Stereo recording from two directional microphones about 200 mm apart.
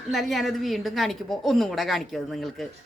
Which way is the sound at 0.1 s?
Centre (ahead or behind).